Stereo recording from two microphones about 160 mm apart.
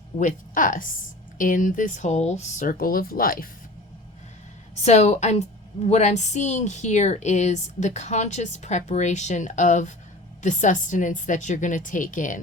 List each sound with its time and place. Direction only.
0.2 s speech: 55° left (ahead or behind)
4.8 s a woman's voice: 45° left (ahead or behind)